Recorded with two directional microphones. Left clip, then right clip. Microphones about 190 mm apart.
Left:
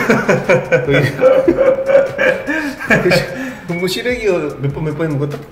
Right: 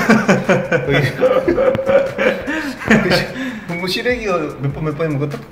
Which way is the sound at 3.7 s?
5° left (ahead or behind).